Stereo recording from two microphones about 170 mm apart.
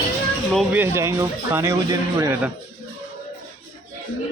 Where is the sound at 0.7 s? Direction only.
15° right (ahead or behind).